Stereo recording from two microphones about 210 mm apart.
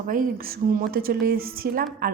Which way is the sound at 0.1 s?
40° right (ahead or behind).